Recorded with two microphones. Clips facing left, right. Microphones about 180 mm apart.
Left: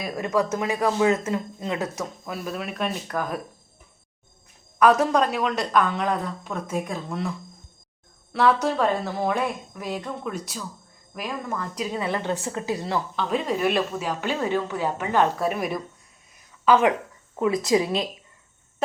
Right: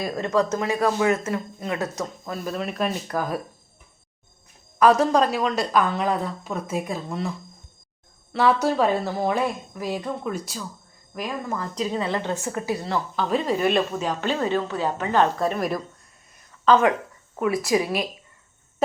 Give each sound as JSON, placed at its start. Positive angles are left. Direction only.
{"t": 0.0, "sound": "a woman's voice", "side_deg": 5}
{"t": 2.0, "sound": "a woman's voice", "side_deg": 5}
{"t": 4.8, "sound": "a woman's voice", "side_deg": 0}
{"t": 11.8, "sound": "a woman's voice", "side_deg": -25}
{"t": 12.3, "sound": "a woman's voice", "side_deg": 20}
{"t": 13.1, "sound": "a woman's voice", "side_deg": 0}